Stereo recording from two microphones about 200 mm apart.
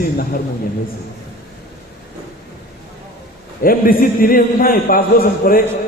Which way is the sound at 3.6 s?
45° left (ahead or behind).